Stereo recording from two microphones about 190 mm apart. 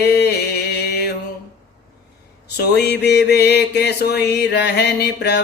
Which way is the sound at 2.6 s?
60° left (ahead or behind).